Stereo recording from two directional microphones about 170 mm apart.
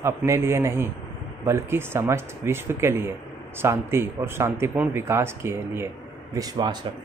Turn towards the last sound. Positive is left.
turn(degrees=-25)  # may be behind; listen again after turning